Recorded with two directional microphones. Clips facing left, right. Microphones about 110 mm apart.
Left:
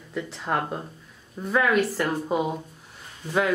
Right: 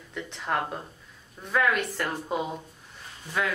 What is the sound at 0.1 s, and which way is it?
Speech, 5° left (ahead or behind).